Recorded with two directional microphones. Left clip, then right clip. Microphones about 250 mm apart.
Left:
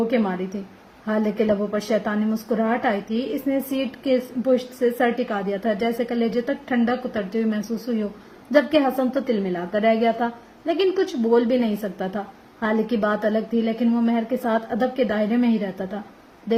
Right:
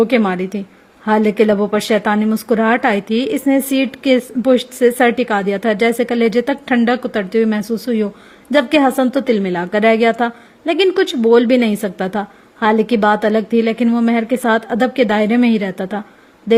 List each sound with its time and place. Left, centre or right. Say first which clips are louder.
0.1 s a woman's voice: right 8 dB; right